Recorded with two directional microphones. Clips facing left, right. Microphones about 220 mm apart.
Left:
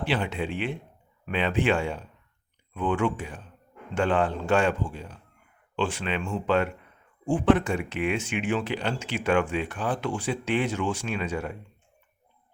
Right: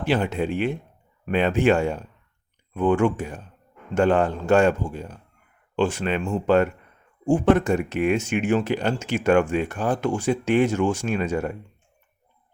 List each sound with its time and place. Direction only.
0.0 s speech: 45° right (ahead or behind)